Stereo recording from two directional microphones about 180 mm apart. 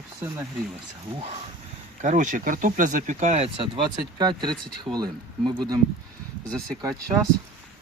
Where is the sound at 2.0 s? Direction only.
45° right (ahead or behind); by 4.6 s 25° right (ahead or behind).